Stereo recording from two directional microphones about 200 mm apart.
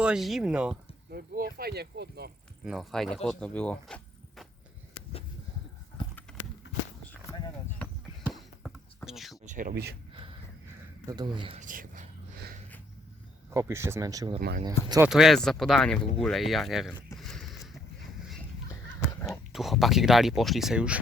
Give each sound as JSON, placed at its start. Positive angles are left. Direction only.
{"t": 0.0, "sound": "speech", "side_deg": -5}
{"t": 1.1, "sound": "speech", "side_deg": -50}
{"t": 2.6, "sound": "speech", "side_deg": 0}
{"t": 6.3, "sound": "horse", "side_deg": 5}
{"t": 7.0, "sound": "clip-clop", "side_deg": 10}
{"t": 9.4, "sound": "a sound", "side_deg": -40}
{"t": 11.0, "sound": "speech", "side_deg": -20}
{"t": 11.6, "sound": "a sound", "side_deg": -40}
{"t": 13.5, "sound": "speech", "side_deg": -15}
{"t": 15.1, "sound": "speech", "side_deg": 0}
{"t": 17.2, "sound": "a sound", "side_deg": 0}
{"t": 19.5, "sound": "speech", "side_deg": 0}